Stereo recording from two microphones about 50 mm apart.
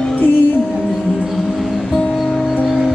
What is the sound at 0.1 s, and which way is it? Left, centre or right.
Music, left.